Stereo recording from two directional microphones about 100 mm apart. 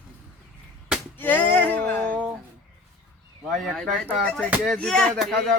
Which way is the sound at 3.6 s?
Centre (ahead or behind).